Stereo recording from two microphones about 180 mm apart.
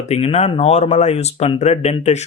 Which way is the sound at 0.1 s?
35° left (ahead or behind).